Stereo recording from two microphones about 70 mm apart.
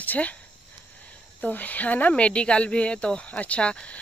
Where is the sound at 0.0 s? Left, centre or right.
Left.